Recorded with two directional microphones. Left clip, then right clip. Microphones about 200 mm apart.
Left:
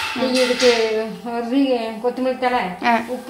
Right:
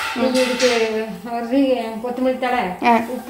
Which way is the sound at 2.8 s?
10° right (ahead or behind).